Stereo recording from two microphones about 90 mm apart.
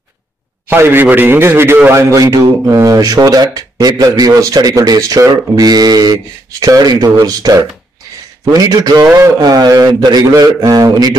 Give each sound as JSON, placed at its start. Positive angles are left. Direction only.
{"t": 0.7, "sound": "a man's voice", "side_deg": -25}
{"t": 9.0, "sound": "a man's voice", "side_deg": -30}
{"t": 9.4, "sound": "a man's voice", "side_deg": -50}